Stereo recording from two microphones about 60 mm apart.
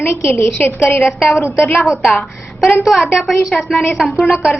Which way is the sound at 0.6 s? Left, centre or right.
Left.